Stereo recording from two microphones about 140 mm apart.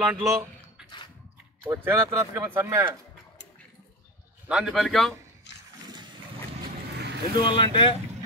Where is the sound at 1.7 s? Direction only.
20° right (ahead or behind).